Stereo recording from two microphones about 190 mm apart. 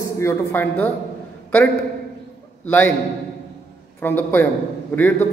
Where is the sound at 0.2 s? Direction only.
10° left (ahead or behind).